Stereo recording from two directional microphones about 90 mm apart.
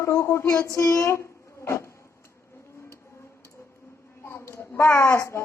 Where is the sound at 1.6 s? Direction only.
30° left (ahead or behind).